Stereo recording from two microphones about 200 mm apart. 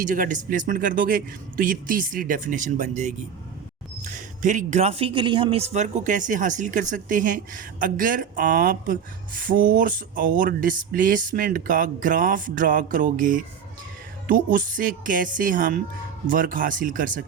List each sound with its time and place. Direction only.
0.0 s a man's voice: 40° right (ahead or behind)